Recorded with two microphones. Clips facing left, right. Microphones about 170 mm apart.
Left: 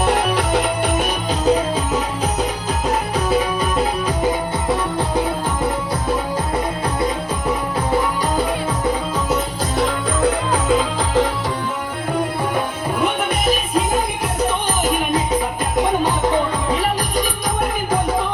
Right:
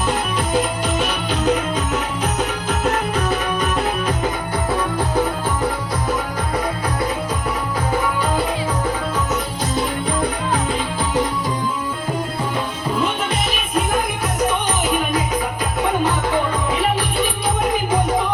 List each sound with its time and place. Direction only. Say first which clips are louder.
0.0 s music: left 4 dB; 70° left (ahead or behind)
1.3 s music: left 3 dB; 35° left (ahead or behind)
10.7 s music: left 4 dB; 90° left